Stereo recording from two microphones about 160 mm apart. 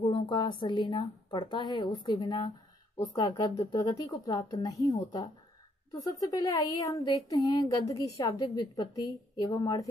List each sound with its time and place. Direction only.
0.0 s a woman's voice: 30° left (ahead or behind)